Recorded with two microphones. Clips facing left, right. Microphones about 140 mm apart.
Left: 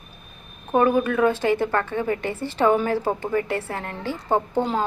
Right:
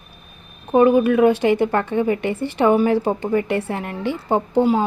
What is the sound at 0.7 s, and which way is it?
A woman's voice, 15° right (ahead or behind).